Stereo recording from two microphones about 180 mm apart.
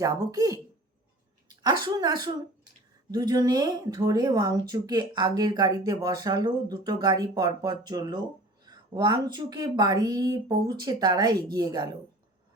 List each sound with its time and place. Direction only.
0.0 s a woman's voice: 20° right (ahead or behind)